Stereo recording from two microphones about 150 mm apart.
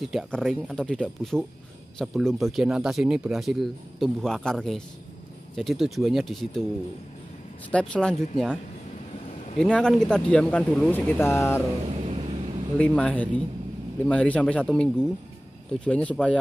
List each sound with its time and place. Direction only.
0.0 s speech: centre (ahead or behind)
7.7 s speech: 5° left (ahead or behind)
9.6 s speech: 5° left (ahead or behind)
11.9 s vehicle: 45° right (ahead or behind)
12.7 s speech: 10° left (ahead or behind)